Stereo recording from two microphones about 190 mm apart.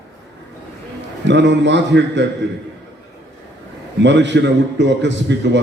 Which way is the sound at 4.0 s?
70° right (ahead or behind).